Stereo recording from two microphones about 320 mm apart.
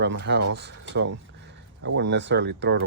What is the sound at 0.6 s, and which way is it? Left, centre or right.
Speech, right.